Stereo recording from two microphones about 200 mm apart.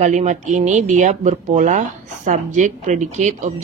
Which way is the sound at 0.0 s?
35° right (ahead or behind).